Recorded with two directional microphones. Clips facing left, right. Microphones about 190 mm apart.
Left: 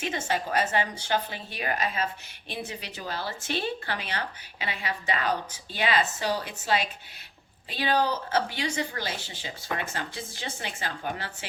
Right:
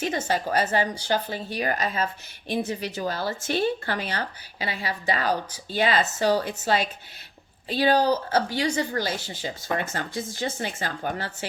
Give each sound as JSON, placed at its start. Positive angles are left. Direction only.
{"t": 0.0, "sound": "speech", "side_deg": -40}